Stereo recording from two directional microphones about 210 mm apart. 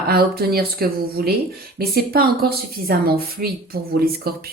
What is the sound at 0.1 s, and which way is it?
Speech, 45° right (ahead or behind).